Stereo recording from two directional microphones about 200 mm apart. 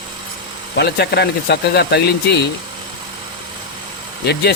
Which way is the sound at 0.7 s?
55° left (ahead or behind).